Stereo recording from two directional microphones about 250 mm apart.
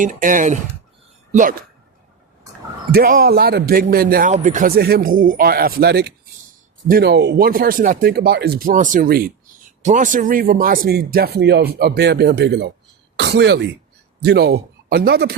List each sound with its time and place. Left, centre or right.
0.0 s speech: right
2.9 s speech: right